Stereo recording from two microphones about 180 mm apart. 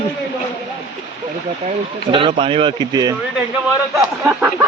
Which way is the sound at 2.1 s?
30° right (ahead or behind).